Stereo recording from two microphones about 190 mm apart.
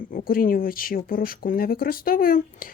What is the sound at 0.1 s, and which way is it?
Speech, 45° left (ahead or behind).